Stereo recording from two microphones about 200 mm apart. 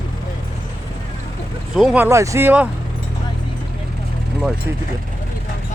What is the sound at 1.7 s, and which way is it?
Speech, 5° right (ahead or behind).